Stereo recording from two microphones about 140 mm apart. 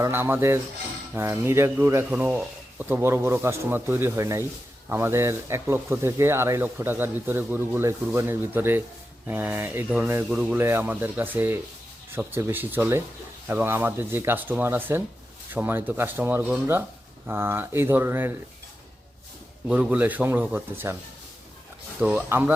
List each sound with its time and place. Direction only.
0.0 s speech: 15° right (ahead or behind)
19.6 s speech: 5° right (ahead or behind)
22.0 s speech: 15° right (ahead or behind)